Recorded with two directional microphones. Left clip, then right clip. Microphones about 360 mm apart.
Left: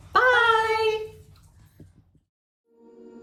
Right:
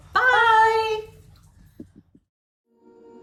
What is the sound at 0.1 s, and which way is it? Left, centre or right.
Female singing, centre.